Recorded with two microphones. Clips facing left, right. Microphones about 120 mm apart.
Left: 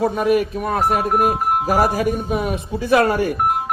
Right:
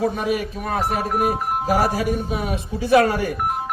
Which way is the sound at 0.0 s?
50° left (ahead or behind).